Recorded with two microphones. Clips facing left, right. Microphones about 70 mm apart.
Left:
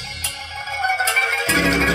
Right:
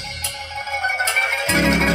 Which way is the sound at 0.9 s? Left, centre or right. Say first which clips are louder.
Left 1 dB; left.